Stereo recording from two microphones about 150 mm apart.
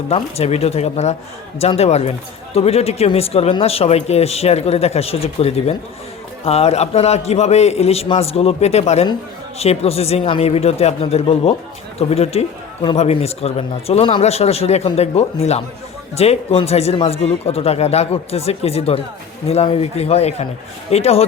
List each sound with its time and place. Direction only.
0.1 s speech: 45° left (ahead or behind)